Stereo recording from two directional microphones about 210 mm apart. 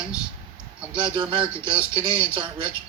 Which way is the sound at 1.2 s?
25° right (ahead or behind).